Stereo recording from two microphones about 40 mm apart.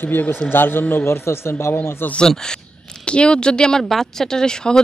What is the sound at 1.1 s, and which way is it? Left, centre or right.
Speech, left.